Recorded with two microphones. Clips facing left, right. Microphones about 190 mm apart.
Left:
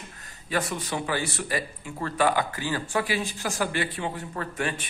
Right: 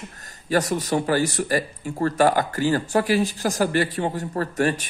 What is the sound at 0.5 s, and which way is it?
Speech, 40° right (ahead or behind).